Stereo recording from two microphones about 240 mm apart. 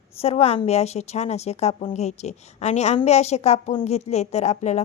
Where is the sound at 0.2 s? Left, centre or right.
Left.